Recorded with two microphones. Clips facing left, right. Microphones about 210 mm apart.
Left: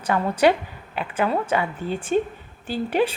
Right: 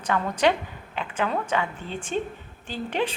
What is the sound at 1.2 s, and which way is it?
Speech, 30° left (ahead or behind).